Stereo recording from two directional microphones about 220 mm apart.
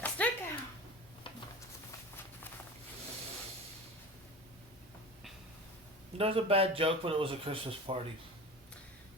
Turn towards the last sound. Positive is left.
turn(degrees=-25)  # may be behind; listen again after turning